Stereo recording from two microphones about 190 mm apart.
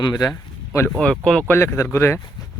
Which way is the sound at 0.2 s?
15° left (ahead or behind).